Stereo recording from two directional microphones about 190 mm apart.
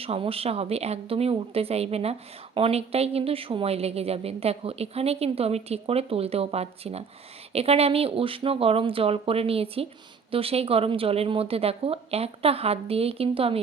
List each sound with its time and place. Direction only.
0.0 s a woman's voice: 30° right (ahead or behind)